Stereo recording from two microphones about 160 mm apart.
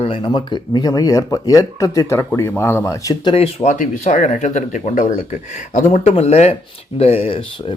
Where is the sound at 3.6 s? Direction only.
50° left (ahead or behind).